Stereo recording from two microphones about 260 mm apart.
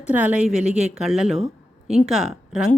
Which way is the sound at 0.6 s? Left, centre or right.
Right.